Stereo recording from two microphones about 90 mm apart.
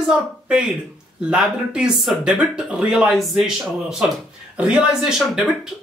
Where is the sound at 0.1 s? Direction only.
10° right (ahead or behind).